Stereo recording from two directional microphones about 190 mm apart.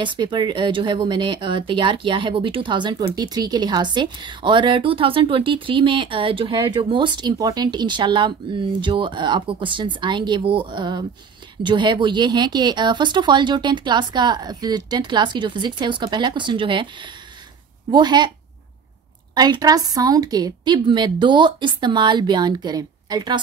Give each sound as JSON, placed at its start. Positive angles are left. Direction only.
{"t": 0.0, "sound": "speech", "side_deg": -25}
{"t": 17.9, "sound": "speech", "side_deg": -20}
{"t": 19.3, "sound": "speech", "side_deg": -20}